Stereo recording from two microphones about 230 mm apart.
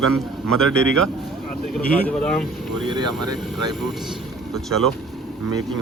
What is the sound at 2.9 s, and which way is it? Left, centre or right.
Speech, centre.